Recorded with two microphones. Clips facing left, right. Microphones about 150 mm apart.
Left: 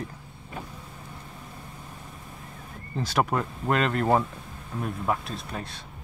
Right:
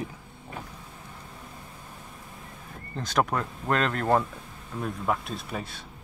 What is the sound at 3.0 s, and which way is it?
Speech, 5° left (ahead or behind).